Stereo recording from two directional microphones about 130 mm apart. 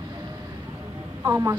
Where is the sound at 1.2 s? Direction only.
25° right (ahead or behind).